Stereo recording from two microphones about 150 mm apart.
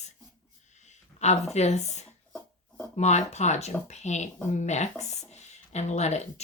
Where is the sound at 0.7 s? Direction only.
50° left (ahead or behind).